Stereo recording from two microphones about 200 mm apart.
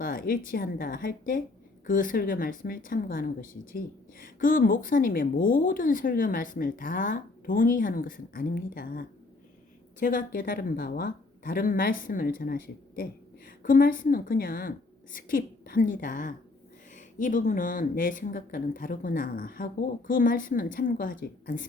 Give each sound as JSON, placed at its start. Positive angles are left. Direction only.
{"t": 0.0, "sound": "speech", "side_deg": 45}